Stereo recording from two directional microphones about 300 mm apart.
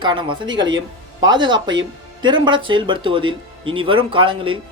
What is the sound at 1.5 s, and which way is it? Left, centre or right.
Speech, right.